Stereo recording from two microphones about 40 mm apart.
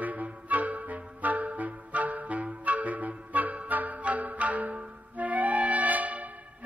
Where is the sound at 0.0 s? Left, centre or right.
Right.